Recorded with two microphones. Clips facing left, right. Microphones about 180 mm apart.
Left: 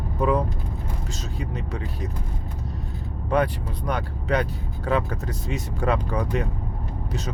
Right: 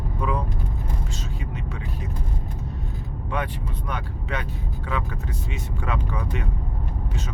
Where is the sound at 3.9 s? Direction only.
40° left (ahead or behind).